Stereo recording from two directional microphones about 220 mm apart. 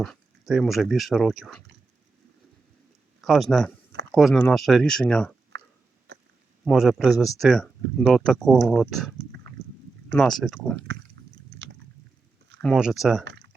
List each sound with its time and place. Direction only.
0.0 s speech: centre (ahead or behind)
3.2 s speech: centre (ahead or behind)
5.5 s a sound: 55° right (ahead or behind)
6.7 s speech: centre (ahead or behind)
11.2 s biting: 55° right (ahead or behind)
12.6 s speech: centre (ahead or behind)